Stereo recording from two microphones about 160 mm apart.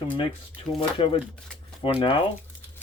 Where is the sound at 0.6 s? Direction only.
35° left (ahead or behind).